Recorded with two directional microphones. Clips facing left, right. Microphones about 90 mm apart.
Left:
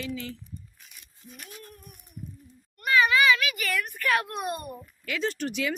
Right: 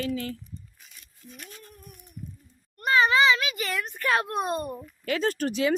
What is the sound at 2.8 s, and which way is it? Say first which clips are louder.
A child's voice: right 1 dB; 30° right (ahead or behind).